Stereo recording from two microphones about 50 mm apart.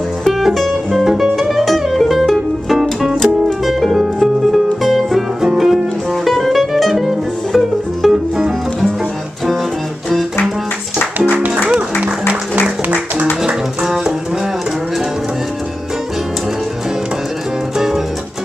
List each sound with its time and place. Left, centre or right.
0.2 s music: centre
11.1 s music: right
17.7 s music: centre